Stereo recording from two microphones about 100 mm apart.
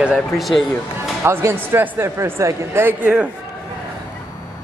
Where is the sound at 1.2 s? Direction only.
25° right (ahead or behind).